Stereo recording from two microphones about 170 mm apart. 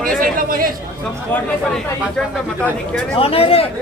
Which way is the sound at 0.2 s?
55° right (ahead or behind).